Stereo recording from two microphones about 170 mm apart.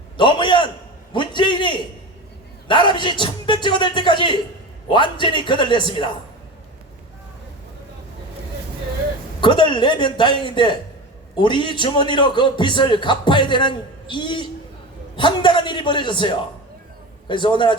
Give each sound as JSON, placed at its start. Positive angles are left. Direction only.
{"t": 0.2, "sound": "a sound", "side_deg": 30}
{"t": 2.6, "sound": "a man's voice", "side_deg": 30}
{"t": 9.4, "sound": "a man's voice", "side_deg": 30}